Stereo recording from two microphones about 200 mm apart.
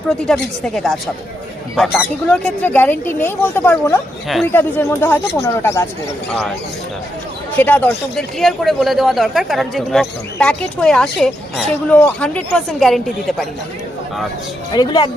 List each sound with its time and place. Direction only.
0.1 s speech: centre (ahead or behind)
7.5 s speech: 10° left (ahead or behind)
14.7 s speech: 20° left (ahead or behind)